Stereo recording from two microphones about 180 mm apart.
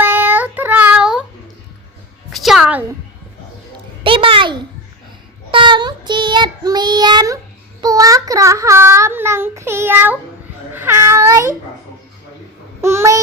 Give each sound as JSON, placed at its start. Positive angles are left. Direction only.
{"t": 0.0, "sound": "child singing", "side_deg": -10}
{"t": 2.3, "sound": "music", "side_deg": 0}
{"t": 4.0, "sound": "a sound", "side_deg": -30}
{"t": 5.5, "sound": "child singing", "side_deg": -25}
{"t": 10.8, "sound": "a sound", "side_deg": -15}
{"t": 12.8, "sound": "babbling", "side_deg": -15}